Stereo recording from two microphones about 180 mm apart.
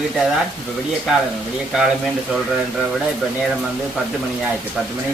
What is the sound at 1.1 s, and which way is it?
Speech, centre (ahead or behind).